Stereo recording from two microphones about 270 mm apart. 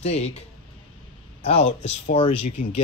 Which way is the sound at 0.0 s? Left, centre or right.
Left.